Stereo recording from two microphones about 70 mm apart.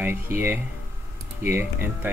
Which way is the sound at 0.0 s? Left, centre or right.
Right.